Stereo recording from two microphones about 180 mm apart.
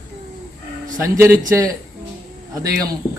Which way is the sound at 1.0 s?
15° right (ahead or behind).